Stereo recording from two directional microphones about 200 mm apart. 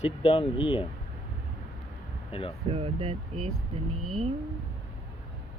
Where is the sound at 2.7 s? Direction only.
30° right (ahead or behind).